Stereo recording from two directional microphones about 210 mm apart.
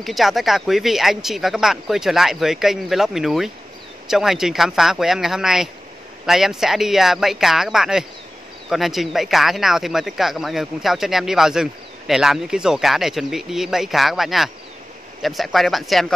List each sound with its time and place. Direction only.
0.0 s speech: centre (ahead or behind)